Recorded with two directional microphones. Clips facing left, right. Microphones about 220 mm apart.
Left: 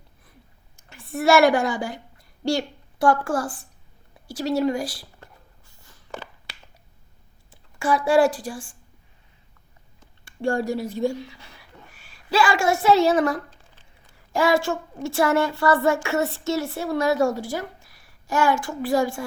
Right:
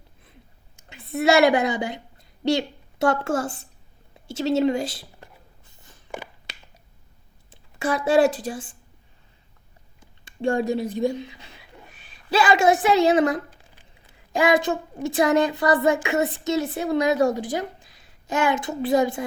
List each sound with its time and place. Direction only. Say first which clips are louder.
0.8 s a woman's voice: right 2 dB; 20° right (ahead or behind)
4.3 s a sound: right 2 dB; 25° right (ahead or behind)
7.5 s a woman's voice: left 2 dB; 20° right (ahead or behind)
10.0 s a woman's voice: right 1 dB; 20° right (ahead or behind)